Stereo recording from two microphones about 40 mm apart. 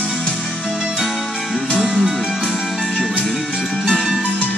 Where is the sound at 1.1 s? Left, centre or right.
Centre.